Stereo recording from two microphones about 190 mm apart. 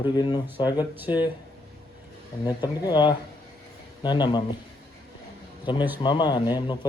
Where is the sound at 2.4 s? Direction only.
20° left (ahead or behind).